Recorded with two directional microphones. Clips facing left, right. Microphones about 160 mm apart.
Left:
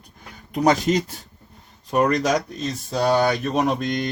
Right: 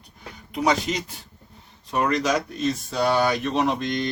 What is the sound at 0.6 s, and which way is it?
Speech, 45° left (ahead or behind).